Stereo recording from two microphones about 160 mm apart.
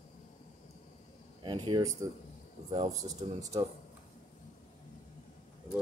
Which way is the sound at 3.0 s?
20° right (ahead or behind).